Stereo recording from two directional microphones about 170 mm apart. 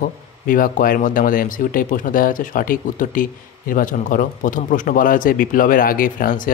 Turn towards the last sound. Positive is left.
turn(degrees=55)  # may be behind; listen again after turning